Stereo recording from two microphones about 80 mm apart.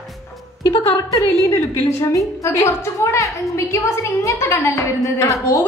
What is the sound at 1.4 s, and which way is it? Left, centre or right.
A woman's voice, left.